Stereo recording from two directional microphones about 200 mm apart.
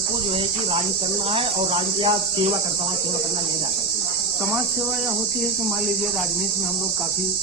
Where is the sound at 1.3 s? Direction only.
30° right (ahead or behind).